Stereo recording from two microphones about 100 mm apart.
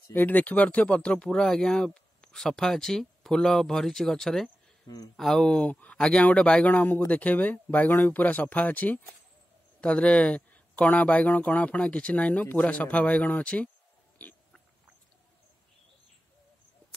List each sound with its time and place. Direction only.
0.1 s speech: 20° left (ahead or behind)
4.8 s speech: 40° left (ahead or behind)
5.1 s speech: 5° left (ahead or behind)
14.1 s pig: 15° left (ahead or behind)